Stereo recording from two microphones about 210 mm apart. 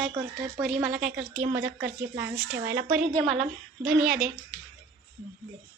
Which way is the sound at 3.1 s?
5° left (ahead or behind).